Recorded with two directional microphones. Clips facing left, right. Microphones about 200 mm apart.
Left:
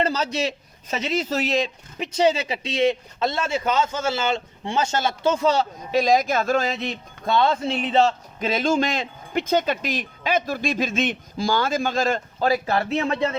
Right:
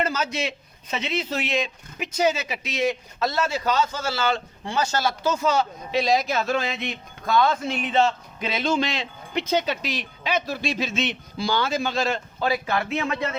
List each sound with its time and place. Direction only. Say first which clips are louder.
0.0 s speech: left 3 dB; 35° left (ahead or behind)
6.0 s speech: left 3 dB; 50° left (ahead or behind); by 13.2 s 35° left (ahead or behind)